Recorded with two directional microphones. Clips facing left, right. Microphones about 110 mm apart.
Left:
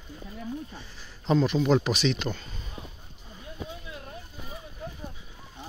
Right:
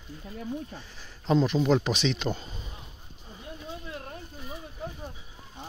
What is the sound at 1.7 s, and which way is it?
Speech, 10° left (ahead or behind).